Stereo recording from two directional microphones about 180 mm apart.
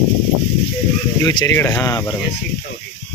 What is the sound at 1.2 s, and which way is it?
Speech, 20° left (ahead or behind).